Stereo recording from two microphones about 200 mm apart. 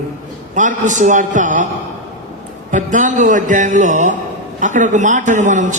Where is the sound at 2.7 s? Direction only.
40° right (ahead or behind).